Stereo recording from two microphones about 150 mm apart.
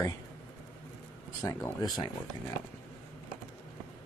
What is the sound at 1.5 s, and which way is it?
Speech, 20° left (ahead or behind).